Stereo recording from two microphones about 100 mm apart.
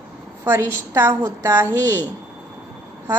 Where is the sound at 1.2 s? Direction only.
25° right (ahead or behind).